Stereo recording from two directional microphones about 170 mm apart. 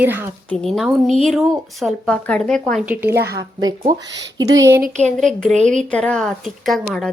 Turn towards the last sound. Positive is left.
turn(degrees=0)  # may be behind; listen again after turning